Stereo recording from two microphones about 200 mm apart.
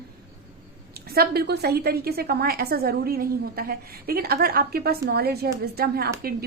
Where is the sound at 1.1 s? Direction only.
50° right (ahead or behind).